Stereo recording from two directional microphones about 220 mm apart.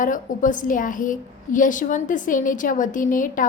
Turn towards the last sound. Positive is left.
turn(degrees=35)  # may be behind; listen again after turning